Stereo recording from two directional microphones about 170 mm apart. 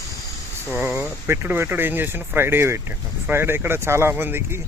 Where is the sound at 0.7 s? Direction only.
15° right (ahead or behind).